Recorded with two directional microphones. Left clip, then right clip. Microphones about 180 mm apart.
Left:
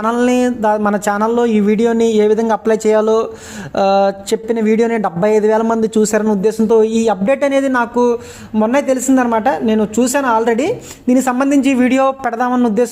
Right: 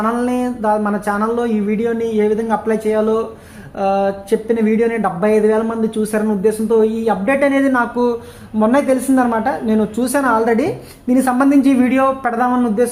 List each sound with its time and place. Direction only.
0.0 s speech: 20° left (ahead or behind)
2.8 s a woman's voice: 45° left (ahead or behind); by 11.9 s 15° left (ahead or behind)
11.9 s speech: 30° left (ahead or behind)